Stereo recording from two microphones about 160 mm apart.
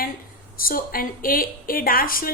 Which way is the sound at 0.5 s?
65° left (ahead or behind).